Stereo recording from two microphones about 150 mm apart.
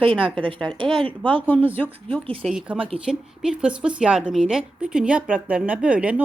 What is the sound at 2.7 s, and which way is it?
Speech, 40° right (ahead or behind).